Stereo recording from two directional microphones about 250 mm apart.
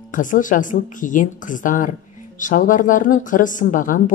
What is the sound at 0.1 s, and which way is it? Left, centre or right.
A woman's voice, left.